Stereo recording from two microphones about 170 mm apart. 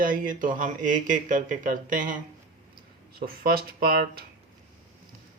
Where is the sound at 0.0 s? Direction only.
55° right (ahead or behind).